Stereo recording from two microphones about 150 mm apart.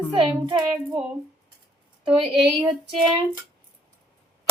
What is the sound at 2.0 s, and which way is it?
Speech, 35° right (ahead or behind).